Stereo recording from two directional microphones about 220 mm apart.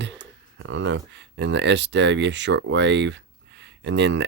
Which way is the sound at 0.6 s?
55° right (ahead or behind).